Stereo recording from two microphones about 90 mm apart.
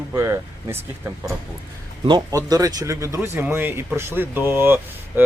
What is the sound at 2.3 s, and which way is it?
Speech, 40° right (ahead or behind).